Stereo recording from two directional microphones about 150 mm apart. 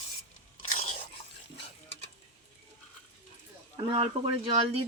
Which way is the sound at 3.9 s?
30° right (ahead or behind).